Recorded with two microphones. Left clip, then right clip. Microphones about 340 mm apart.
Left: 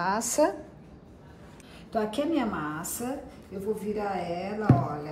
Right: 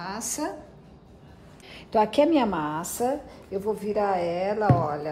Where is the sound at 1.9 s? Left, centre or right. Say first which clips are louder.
Right 8 dB; centre.